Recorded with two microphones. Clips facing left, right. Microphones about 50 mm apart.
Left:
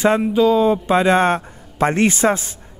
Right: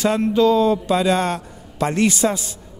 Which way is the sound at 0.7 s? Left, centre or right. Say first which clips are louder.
Left 3 dB; left.